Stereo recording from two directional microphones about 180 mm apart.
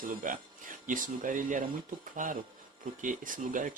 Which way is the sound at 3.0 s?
45° right (ahead or behind).